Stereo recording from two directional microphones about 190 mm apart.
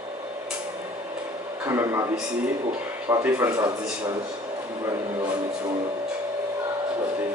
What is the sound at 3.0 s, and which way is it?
Speech, 15° right (ahead or behind).